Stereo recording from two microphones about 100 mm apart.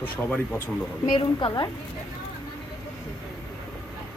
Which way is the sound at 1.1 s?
60° left (ahead or behind).